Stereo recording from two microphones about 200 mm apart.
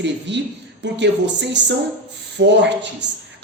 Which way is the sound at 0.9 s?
60° right (ahead or behind).